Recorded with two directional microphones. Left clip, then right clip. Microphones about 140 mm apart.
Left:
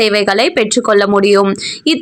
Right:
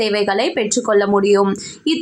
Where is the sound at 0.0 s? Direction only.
20° left (ahead or behind).